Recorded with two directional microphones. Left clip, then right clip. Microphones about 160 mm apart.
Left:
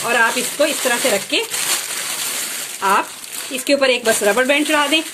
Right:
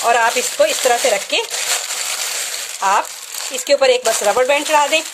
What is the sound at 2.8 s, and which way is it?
Speech, 30° right (ahead or behind).